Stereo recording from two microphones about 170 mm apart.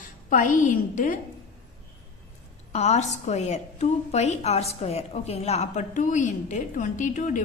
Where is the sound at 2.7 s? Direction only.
40° left (ahead or behind).